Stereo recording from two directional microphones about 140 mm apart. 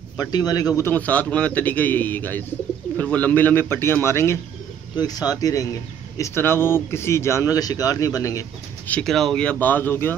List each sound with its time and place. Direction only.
0.2 s speech: 25° left (ahead or behind)
8.8 s speech: 5° left (ahead or behind)